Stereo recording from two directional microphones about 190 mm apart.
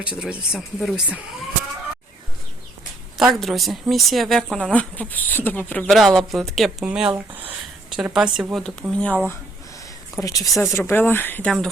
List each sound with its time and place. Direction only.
0.2 s speech: 5° right (ahead or behind)
3.2 s speech: centre (ahead or behind)
10.2 s speech: 20° left (ahead or behind)